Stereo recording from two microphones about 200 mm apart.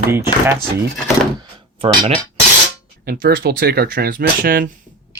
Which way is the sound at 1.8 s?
25° right (ahead or behind).